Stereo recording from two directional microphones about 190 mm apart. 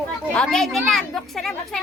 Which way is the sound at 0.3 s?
5° left (ahead or behind).